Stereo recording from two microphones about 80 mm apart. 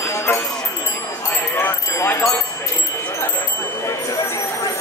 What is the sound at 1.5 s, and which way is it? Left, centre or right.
Jingle bell, left.